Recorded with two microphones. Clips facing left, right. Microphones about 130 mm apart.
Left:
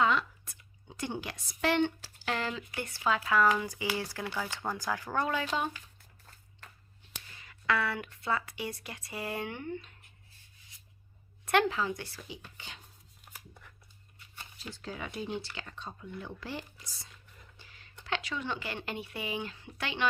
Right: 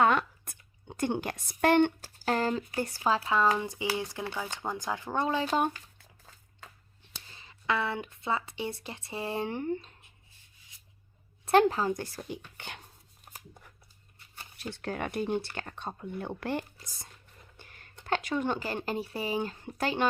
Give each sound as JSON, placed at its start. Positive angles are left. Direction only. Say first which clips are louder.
{"t": 0.0, "sound": "speech", "louder": "right 3 dB", "side_deg": -55}
{"t": 5.5, "sound": "a woman's voice", "louder": "right 5 dB", "side_deg": -45}
{"t": 7.3, "sound": "speech", "louder": "even", "side_deg": -25}
{"t": 11.7, "sound": "a woman's voice", "louder": "right 4 dB", "side_deg": -40}
{"t": 14.6, "sound": "a woman's voice", "louder": "right 6 dB", "side_deg": -60}